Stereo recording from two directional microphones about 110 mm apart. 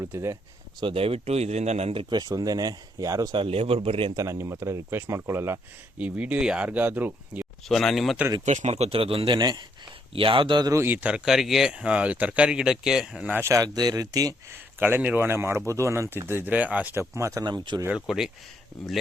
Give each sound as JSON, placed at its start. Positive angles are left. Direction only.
{"t": 0.0, "sound": "speech", "side_deg": -25}
{"t": 0.8, "sound": "speech", "side_deg": -55}
{"t": 2.1, "sound": "speech", "side_deg": -35}
{"t": 3.3, "sound": "speech", "side_deg": -55}
{"t": 4.1, "sound": "speech", "side_deg": -30}
{"t": 6.0, "sound": "speech", "side_deg": -10}
{"t": 7.7, "sound": "speech", "side_deg": 0}
{"t": 8.4, "sound": "speech", "side_deg": -90}
{"t": 10.1, "sound": "speech", "side_deg": -55}
{"t": 10.7, "sound": "speech", "side_deg": -20}
{"t": 13.3, "sound": "speech", "side_deg": -25}
{"t": 14.5, "sound": "speech", "side_deg": -20}
{"t": 17.4, "sound": "speech", "side_deg": -40}
{"t": 17.8, "sound": "speech", "side_deg": -5}